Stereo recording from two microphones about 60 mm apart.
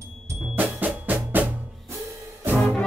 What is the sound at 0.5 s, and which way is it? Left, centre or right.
Percussion, right.